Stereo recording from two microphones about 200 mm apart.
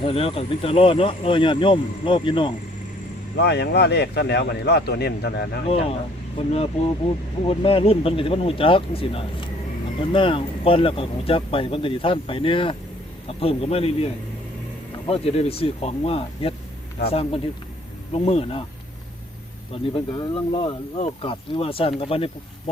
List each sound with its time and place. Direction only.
0.0 s speech: 30° left (ahead or behind)
3.3 s speech: 55° left (ahead or behind)
6.3 s speech: 30° left (ahead or behind)
19.7 s speech: 25° left (ahead or behind)